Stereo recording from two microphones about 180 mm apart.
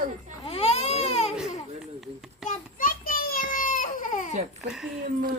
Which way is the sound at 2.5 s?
50° left (ahead or behind).